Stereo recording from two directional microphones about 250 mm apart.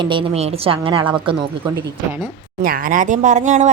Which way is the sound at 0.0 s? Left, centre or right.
Centre.